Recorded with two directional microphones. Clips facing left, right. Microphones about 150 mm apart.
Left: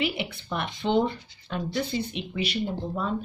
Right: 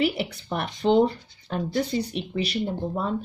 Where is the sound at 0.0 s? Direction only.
40° right (ahead or behind).